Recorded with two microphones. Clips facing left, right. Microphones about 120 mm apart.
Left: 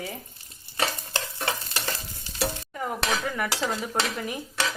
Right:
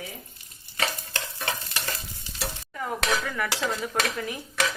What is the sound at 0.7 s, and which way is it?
Stir, 30° left (ahead or behind).